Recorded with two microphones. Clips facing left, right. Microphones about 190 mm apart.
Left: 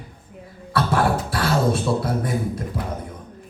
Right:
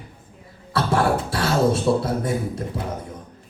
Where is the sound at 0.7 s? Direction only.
25° right (ahead or behind).